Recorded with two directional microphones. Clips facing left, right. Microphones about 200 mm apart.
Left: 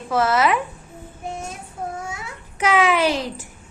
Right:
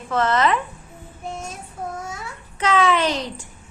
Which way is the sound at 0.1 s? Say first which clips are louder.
Left 1 dB; 10° left (ahead or behind).